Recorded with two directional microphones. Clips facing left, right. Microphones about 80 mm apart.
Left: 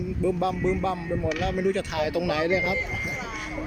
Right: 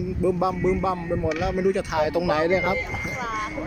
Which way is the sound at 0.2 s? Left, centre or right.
Centre.